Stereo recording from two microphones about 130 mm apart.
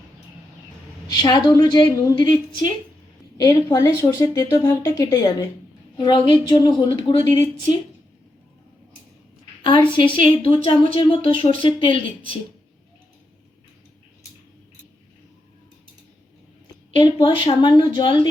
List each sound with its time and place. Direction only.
1.1 s a woman's voice: 30° left (ahead or behind)
6.0 s a woman's voice: 35° left (ahead or behind)
9.6 s a woman's voice: 40° left (ahead or behind)
16.9 s a woman's voice: 40° left (ahead or behind)